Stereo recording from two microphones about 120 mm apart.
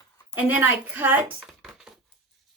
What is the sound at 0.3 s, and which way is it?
Speech, 15° right (ahead or behind).